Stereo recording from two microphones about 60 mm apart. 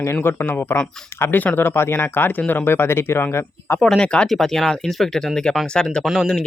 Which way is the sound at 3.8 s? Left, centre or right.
Centre.